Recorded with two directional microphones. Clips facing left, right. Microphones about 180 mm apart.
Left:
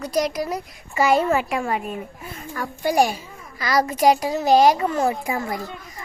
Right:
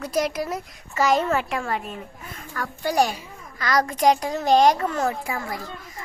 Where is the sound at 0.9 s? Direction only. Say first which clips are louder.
Left 2 dB; 10° left (ahead or behind).